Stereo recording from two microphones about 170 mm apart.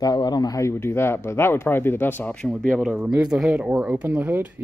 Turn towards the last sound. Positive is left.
turn(degrees=-10)  # may be behind; listen again after turning